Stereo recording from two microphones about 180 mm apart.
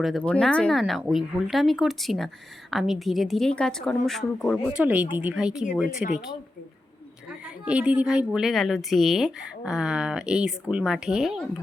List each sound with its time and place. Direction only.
0.0 s a woman's voice: 5° left (ahead or behind)
4.7 s speech: 5° right (ahead or behind)
7.3 s a woman's voice: 5° right (ahead or behind)